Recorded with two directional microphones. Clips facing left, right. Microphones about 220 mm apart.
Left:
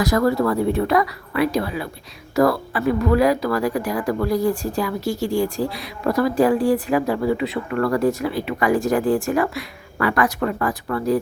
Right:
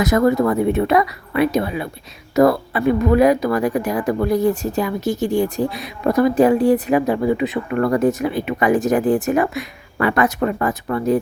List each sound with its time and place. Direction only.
0.0 s speech: 20° right (ahead or behind)